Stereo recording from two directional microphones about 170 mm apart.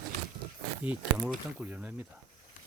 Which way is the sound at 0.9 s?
10° right (ahead or behind).